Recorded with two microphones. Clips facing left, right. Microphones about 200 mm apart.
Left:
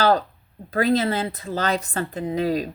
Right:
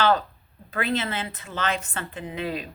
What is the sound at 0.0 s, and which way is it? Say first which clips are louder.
A woman's voice: left 3 dB; 35° left (ahead or behind).